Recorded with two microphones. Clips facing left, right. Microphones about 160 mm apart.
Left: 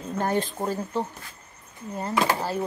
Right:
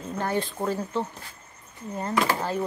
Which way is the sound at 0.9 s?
10° left (ahead or behind).